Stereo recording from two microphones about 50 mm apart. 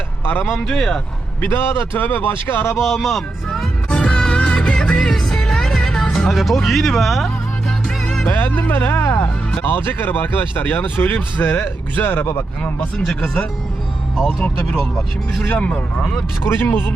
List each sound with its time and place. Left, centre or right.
0.3 s speech: left
2.7 s speech: centre
3.8 s music: left
6.3 s speech: centre
7.9 s music: centre
8.3 s speech: left
13.2 s speech: left
15.5 s speech: left
16.4 s speech: left